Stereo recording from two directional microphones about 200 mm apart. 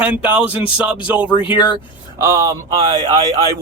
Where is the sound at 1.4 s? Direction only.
25° left (ahead or behind).